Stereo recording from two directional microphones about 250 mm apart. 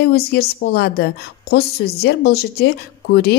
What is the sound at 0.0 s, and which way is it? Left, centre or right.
Speech, left.